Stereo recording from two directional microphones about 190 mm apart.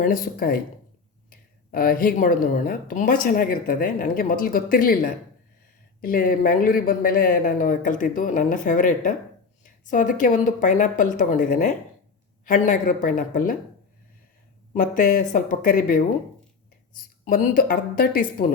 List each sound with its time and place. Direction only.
0.0 s speech: 45° left (ahead or behind)
14.7 s speech: 45° left (ahead or behind)
17.2 s speech: 50° left (ahead or behind)